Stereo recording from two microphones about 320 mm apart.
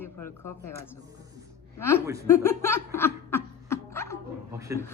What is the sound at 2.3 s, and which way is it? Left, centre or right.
Laughter, centre.